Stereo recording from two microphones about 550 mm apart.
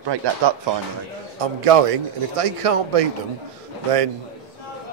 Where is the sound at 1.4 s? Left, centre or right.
Right.